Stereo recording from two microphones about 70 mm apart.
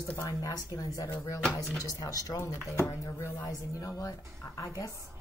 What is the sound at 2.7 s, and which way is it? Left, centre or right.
A woman's voice, left.